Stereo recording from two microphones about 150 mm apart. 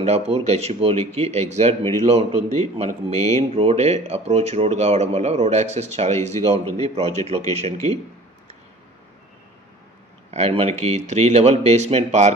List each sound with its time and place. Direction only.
0.0 s speech: 45° right (ahead or behind)
10.3 s speech: 40° right (ahead or behind)